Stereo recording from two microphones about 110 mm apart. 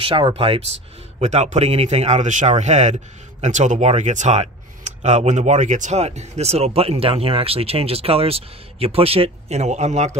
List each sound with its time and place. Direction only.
0.0 s speech: 55° right (ahead or behind)
1.2 s a man's voice: 90° right